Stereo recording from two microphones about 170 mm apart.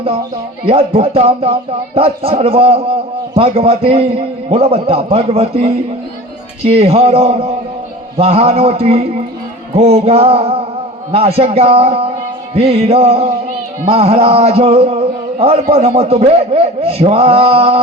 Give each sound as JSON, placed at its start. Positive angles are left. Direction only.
{"t": 0.6, "sound": "speech", "side_deg": -35}